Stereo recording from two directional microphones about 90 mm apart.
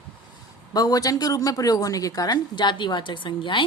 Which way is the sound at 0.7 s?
45° left (ahead or behind).